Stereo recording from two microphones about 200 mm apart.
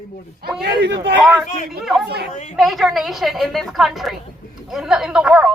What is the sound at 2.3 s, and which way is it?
Speech, 35° left (ahead or behind).